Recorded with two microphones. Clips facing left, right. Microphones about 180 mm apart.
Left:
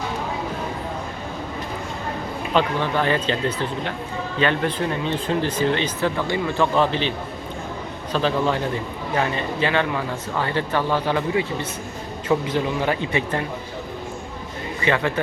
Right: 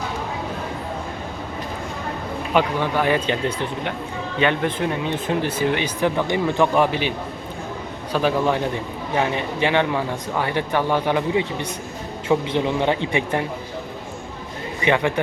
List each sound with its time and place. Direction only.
2.5 s speech: 10° right (ahead or behind)
8.1 s speech: 15° right (ahead or behind)
12.5 s speech: 20° right (ahead or behind)
14.8 s speech: 15° right (ahead or behind)